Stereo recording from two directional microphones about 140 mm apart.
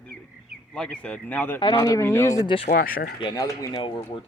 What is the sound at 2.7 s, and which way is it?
Speech, 90° left.